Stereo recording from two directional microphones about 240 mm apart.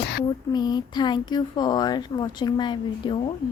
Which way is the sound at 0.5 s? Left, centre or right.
Centre.